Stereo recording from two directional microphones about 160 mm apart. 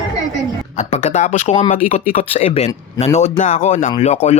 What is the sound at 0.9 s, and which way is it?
Speech, 45° left (ahead or behind).